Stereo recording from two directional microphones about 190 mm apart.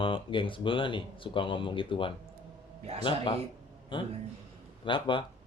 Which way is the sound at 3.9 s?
25° left (ahead or behind).